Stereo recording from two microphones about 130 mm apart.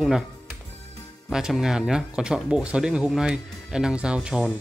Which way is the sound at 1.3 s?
5° right (ahead or behind).